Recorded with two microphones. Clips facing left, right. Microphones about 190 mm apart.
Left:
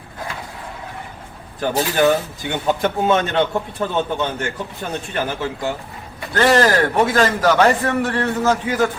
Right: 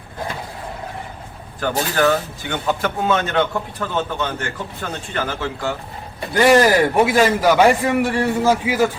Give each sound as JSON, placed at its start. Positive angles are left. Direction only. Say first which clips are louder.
{"t": 1.6, "sound": "speech", "louder": "left 2 dB", "side_deg": 20}
{"t": 6.3, "sound": "a man's voice", "louder": "right 2 dB", "side_deg": -15}